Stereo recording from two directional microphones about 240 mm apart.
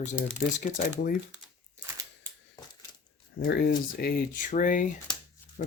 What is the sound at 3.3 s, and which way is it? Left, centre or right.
Speech, left.